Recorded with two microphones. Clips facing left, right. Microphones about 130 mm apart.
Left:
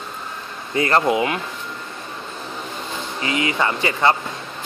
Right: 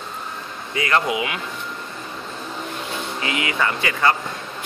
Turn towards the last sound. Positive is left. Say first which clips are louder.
# left 2 dB
turn(degrees=25)  # may be behind; listen again after turning